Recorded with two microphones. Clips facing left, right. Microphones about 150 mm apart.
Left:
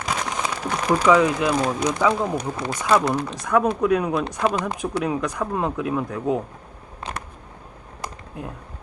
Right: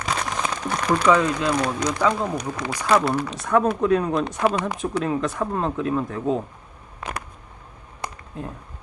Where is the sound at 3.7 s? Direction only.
5° left (ahead or behind).